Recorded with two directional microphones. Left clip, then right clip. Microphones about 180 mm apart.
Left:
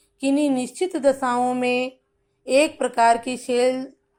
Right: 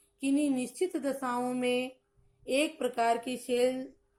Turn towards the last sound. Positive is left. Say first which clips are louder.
# left 8 dB
turn(degrees=15)  # may be behind; listen again after turning